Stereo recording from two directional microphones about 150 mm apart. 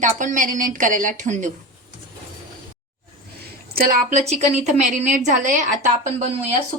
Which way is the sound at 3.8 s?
80° right.